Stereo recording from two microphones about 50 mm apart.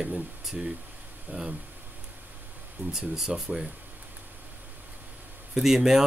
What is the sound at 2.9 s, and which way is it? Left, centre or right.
Speech, centre.